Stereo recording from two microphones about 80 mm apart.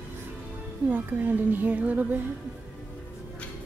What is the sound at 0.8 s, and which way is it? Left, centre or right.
A woman's voice, right.